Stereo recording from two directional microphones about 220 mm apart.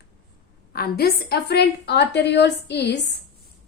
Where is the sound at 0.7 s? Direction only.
45° left (ahead or behind).